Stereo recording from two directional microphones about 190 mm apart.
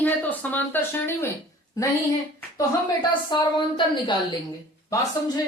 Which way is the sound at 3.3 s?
25° left (ahead or behind).